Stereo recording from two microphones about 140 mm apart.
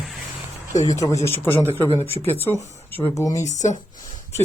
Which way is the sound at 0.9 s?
25° left (ahead or behind).